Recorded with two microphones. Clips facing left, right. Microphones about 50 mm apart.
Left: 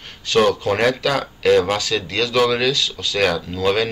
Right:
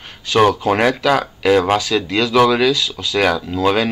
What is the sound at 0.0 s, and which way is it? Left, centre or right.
Speech, centre.